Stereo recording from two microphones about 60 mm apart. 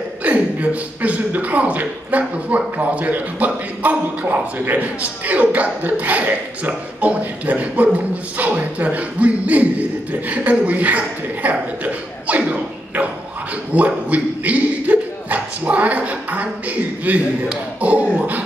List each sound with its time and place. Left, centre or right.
0.2 s a man's voice: right